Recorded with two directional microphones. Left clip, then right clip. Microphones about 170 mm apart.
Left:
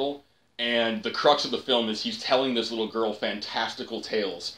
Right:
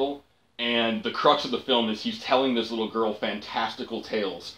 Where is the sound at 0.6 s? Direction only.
30° left (ahead or behind).